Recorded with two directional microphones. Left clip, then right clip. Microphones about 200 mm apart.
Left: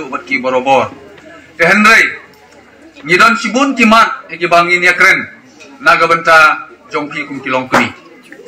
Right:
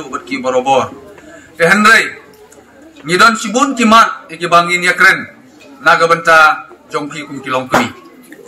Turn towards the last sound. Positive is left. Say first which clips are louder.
# left 2 dB
turn(degrees=35)  # may be behind; listen again after turning